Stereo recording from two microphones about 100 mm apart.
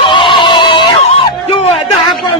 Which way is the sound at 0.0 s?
55° left (ahead or behind).